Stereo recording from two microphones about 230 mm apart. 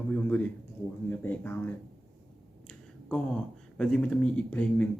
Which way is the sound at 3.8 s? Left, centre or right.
Centre.